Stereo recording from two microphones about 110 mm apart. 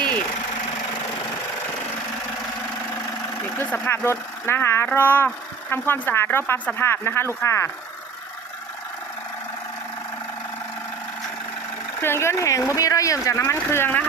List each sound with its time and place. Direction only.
3.6 s speech: 20° left (ahead or behind)
12.0 s speech: 25° left (ahead or behind)